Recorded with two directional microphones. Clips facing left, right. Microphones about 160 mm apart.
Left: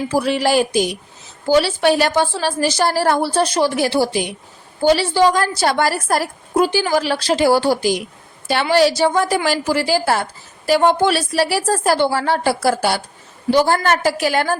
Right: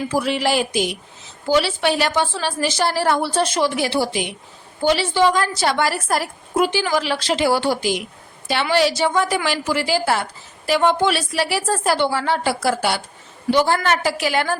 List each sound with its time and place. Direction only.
0.1 s a woman's voice: 40° left (ahead or behind)